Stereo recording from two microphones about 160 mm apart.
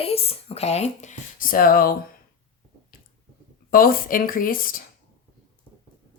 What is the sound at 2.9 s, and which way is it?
Squish, 65° left (ahead or behind).